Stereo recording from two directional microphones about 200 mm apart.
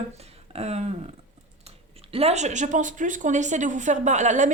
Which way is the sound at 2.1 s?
30° right (ahead or behind).